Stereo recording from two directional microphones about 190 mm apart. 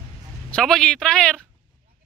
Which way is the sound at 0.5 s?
5° left (ahead or behind).